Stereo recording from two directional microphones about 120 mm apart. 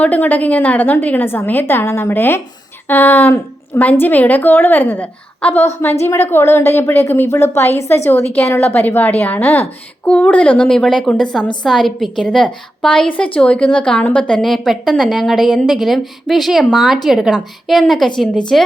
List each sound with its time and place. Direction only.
0.0 s a woman's voice: 15° left (ahead or behind)